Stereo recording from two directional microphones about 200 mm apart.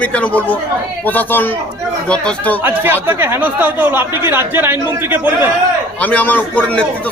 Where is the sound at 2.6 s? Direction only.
10° right (ahead or behind).